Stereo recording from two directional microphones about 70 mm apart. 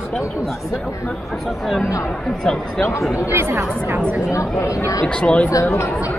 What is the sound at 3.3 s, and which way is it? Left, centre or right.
Speech, right.